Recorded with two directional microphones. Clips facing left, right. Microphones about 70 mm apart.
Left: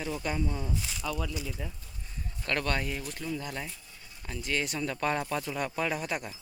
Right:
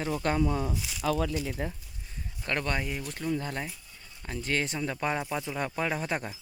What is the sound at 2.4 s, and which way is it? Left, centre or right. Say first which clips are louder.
Speech: even; right.